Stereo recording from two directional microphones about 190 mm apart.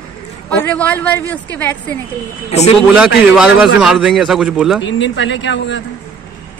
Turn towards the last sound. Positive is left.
turn(degrees=70)  # may be behind; listen again after turning